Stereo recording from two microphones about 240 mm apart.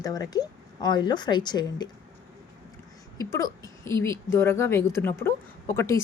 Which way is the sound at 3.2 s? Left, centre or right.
Centre.